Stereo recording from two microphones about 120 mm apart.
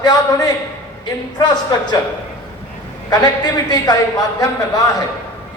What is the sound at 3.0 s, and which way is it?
A woman's voice, 35° left (ahead or behind).